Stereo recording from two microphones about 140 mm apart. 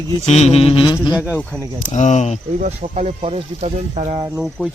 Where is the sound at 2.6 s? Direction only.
50° right (ahead or behind).